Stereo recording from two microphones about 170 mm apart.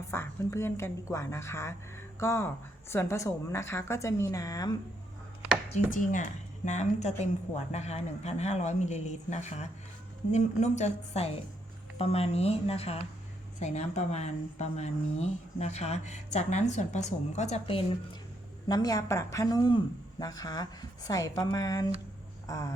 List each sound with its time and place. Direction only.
0.1 s a woman's voice: 15° left (ahead or behind)
5.7 s a woman's voice: 50° left (ahead or behind)
18.7 s a woman's voice: 20° left (ahead or behind)